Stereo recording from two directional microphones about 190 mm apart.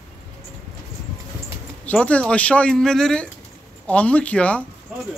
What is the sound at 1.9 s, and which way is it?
A man's voice, 5° left (ahead or behind).